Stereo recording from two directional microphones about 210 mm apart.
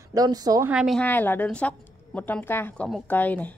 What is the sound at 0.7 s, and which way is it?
A woman's voice, centre (ahead or behind).